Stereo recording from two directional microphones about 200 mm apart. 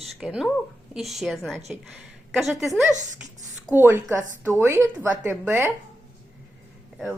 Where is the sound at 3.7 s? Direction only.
10° right (ahead or behind).